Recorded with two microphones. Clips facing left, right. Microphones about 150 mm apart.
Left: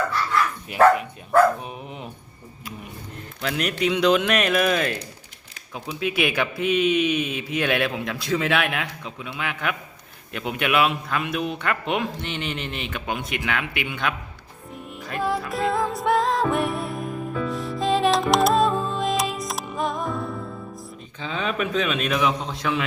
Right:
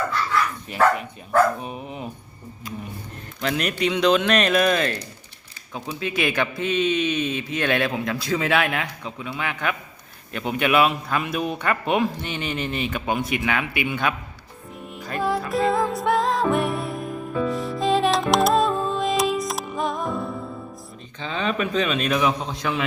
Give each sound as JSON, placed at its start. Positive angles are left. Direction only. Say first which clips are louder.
{"t": 1.6, "sound": "a man's voice", "louder": "right 3 dB", "side_deg": 0}
{"t": 3.4, "sound": "a man's voice", "louder": "right 1 dB", "side_deg": 0}
{"t": 15.0, "sound": "music", "louder": "right 1 dB", "side_deg": 0}
{"t": 21.2, "sound": "a man's voice", "louder": "right 1 dB", "side_deg": 5}